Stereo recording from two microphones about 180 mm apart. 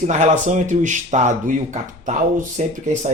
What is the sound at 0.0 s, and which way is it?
Speech, 40° right (ahead or behind).